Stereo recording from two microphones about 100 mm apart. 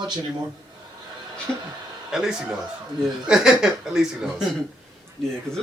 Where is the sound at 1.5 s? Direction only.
10° left (ahead or behind).